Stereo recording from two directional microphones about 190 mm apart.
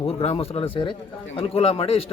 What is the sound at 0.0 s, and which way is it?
Speech, 30° left (ahead or behind).